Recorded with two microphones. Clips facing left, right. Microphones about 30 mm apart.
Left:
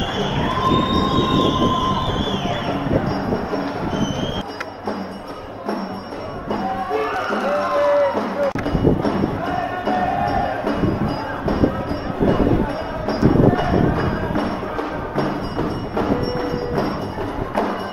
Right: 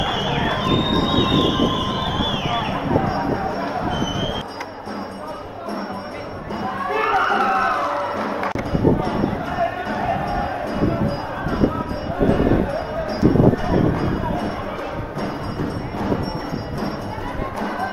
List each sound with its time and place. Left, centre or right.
0.0 s crowd: centre
1.0 s music: centre
2.7 s music: centre
6.9 s a sound: right
7.7 s music: centre
13.9 s music: left